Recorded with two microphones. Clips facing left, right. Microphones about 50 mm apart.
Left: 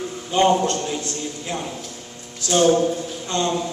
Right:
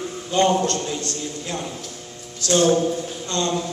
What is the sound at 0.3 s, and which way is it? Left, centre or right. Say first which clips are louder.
A man's voice: left 1 dB; centre.